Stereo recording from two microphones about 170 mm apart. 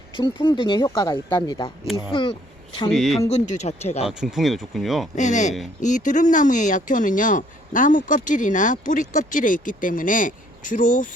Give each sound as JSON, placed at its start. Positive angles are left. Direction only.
{"t": 0.1, "sound": "speech", "side_deg": 30}
{"t": 2.9, "sound": "speech", "side_deg": 0}
{"t": 3.2, "sound": "speech", "side_deg": 40}
{"t": 4.0, "sound": "speech", "side_deg": -5}
{"t": 5.1, "sound": "speech", "side_deg": 45}